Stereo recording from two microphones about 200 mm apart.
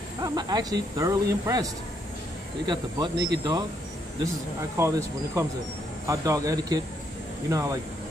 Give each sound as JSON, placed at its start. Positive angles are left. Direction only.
{"t": 0.2, "sound": "speech", "side_deg": -20}
{"t": 4.7, "sound": "speech", "side_deg": -15}